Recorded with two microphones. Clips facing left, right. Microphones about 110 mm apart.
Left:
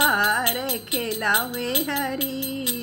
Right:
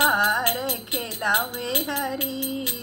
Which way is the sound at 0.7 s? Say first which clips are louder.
Left 3 dB; 20° right (ahead or behind).